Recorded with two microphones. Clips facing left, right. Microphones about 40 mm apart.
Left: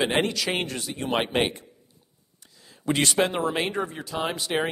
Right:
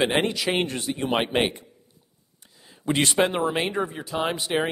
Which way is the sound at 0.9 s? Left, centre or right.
Centre.